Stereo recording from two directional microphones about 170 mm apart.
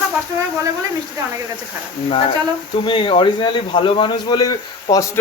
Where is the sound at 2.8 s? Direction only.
30° left (ahead or behind).